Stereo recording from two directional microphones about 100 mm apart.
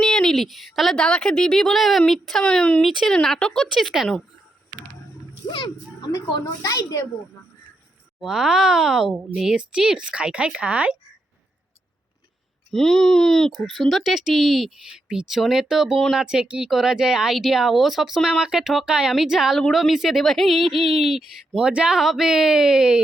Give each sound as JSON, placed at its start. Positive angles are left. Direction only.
{"t": 0.0, "sound": "speech", "side_deg": 5}
{"t": 5.5, "sound": "a child's voice", "side_deg": 45}
{"t": 8.2, "sound": "speech", "side_deg": -5}
{"t": 12.7, "sound": "speech", "side_deg": 5}